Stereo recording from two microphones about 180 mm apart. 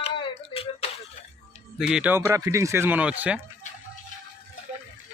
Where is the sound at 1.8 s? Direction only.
5° right (ahead or behind).